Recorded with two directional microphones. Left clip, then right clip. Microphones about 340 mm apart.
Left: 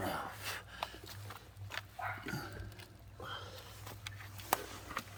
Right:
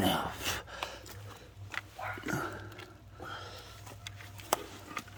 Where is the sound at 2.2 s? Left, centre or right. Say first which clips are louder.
Right 8 dB; centre.